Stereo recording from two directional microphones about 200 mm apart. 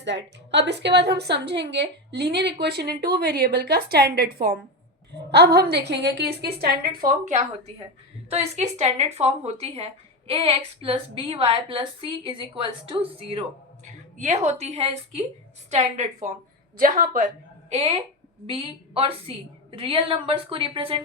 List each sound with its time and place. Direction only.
0.0 s a woman's voice: 60° right (ahead or behind); by 17.2 s 45° right (ahead or behind)
17.7 s a woman's voice: 30° right (ahead or behind)